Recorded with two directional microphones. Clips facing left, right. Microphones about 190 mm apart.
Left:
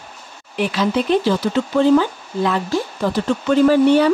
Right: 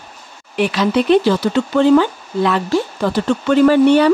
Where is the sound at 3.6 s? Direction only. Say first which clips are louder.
Right 2 dB; 70° right (ahead or behind).